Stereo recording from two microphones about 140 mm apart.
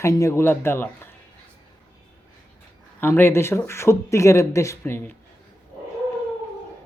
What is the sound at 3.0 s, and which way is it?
Speech, 20° left (ahead or behind).